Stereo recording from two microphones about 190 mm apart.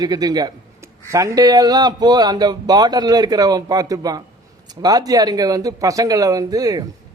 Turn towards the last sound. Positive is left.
turn(degrees=-20)  # may be behind; listen again after turning